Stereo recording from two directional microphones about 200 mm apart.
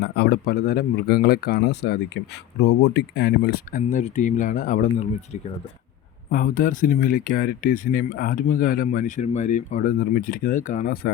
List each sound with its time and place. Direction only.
0.0 s speech: 50° left (ahead or behind)